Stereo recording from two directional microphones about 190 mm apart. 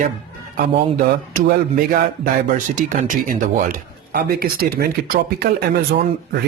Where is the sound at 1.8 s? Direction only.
45° right (ahead or behind).